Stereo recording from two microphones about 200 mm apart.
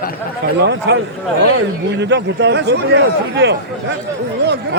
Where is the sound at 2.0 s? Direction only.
60° right (ahead or behind).